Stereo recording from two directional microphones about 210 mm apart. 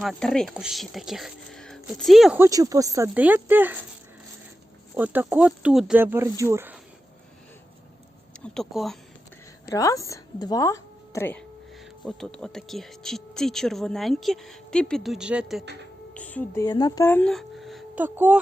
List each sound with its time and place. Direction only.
0.0 s speech: centre (ahead or behind)
2.4 s speech: 15° right (ahead or behind)
4.9 s speech: 5° right (ahead or behind)
8.5 s speech: centre (ahead or behind)
9.6 s a woman's voice: 15° left (ahead or behind); by 18.3 s 10° right (ahead or behind)